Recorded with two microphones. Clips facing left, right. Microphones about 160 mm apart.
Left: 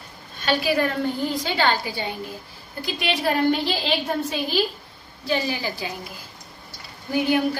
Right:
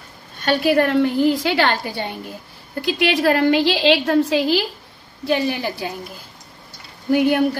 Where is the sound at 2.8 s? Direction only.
90° right.